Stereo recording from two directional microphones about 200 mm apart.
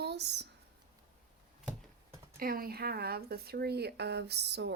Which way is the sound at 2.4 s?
45° right (ahead or behind).